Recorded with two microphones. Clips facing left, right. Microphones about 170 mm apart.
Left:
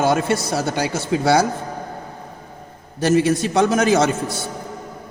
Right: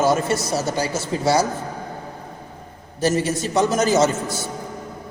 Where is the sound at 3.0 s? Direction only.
60° left (ahead or behind).